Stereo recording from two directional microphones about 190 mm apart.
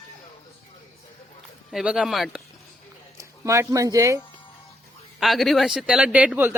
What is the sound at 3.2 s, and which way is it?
Speech, 15° right (ahead or behind).